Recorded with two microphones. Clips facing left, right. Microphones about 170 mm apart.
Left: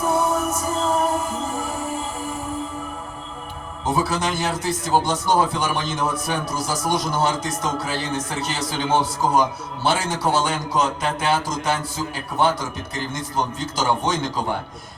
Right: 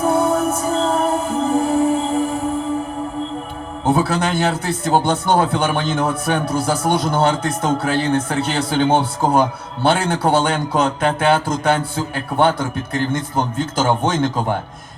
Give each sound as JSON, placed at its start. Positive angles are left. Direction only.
{"t": 0.0, "sound": "music", "side_deg": -60}
{"t": 3.8, "sound": "a man's voice", "side_deg": -55}